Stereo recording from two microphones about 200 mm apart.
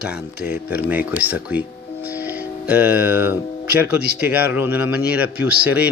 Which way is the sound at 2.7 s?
10° right (ahead or behind).